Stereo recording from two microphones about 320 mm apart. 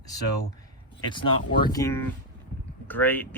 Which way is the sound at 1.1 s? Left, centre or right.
Centre.